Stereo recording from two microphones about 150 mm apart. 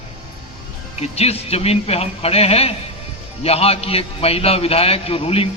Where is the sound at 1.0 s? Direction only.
45° left (ahead or behind).